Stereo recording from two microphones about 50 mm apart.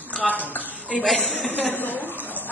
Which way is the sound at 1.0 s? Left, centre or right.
Centre.